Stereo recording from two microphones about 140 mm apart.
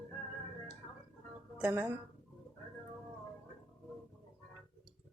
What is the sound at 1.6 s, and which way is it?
Speech, 15° right (ahead or behind).